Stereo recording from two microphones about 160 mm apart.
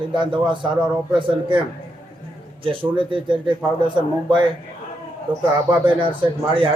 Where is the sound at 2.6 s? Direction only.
30° right (ahead or behind).